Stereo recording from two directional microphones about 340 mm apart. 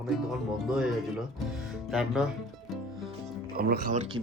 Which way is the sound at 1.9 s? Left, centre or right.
Centre.